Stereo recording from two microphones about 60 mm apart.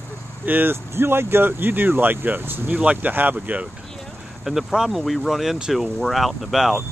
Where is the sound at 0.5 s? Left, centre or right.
Right.